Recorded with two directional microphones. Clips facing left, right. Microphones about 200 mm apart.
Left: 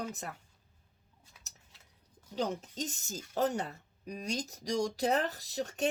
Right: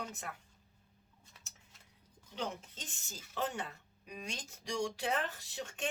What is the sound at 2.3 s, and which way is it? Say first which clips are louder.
Speech: left 7 dB; 35° left (ahead or behind).